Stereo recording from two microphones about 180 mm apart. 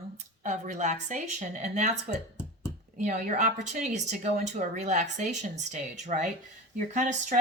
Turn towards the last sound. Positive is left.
turn(degrees=-40)  # may be behind; listen again after turning